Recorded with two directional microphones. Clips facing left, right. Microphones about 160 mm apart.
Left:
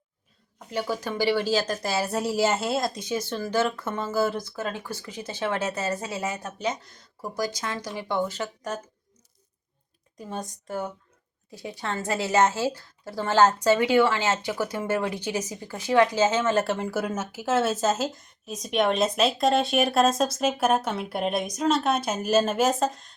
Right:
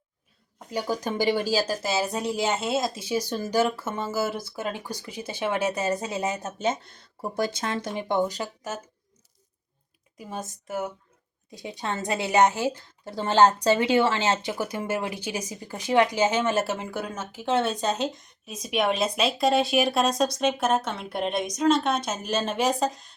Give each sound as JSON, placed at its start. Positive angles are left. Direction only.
{"t": 1.0, "sound": "speech", "side_deg": -20}
{"t": 8.4, "sound": "speech", "side_deg": -5}
{"t": 10.2, "sound": "speech", "side_deg": -10}
{"t": 11.5, "sound": "speech", "side_deg": -20}
{"t": 16.6, "sound": "speech", "side_deg": 0}